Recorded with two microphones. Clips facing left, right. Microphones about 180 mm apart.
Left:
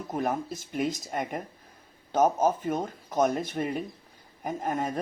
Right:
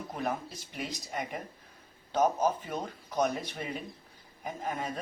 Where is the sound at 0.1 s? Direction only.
50° left (ahead or behind).